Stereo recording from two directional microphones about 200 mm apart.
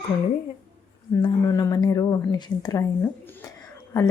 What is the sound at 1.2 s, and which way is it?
Speech, 15° left (ahead or behind).